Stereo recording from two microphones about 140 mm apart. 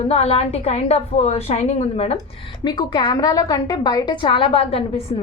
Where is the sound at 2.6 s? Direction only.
30° left (ahead or behind).